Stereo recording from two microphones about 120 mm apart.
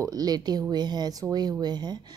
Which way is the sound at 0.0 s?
30° right (ahead or behind).